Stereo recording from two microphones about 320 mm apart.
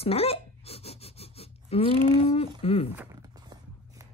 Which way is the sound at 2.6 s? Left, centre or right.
Centre.